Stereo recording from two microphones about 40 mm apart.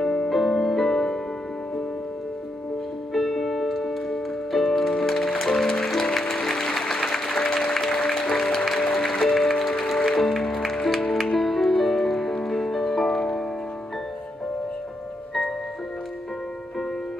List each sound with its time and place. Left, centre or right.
0.0 s music: centre
3.1 s music: centre